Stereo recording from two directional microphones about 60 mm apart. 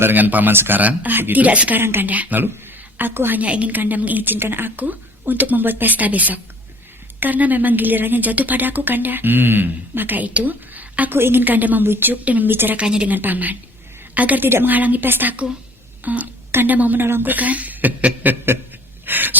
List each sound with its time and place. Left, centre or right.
0.0 s a woman's voice: right
1.8 s a woman's voice: right
2.0 s a woman's voice: right
3.4 s a woman's voice: right
11.2 s a woman's voice: right
12.2 s a woman's voice: right
12.5 s a woman's voice: right
12.7 s a woman's voice: centre
13.1 s a woman's voice: right
19.0 s a sound: right